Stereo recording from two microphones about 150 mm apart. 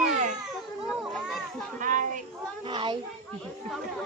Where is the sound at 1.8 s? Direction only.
60° right (ahead or behind).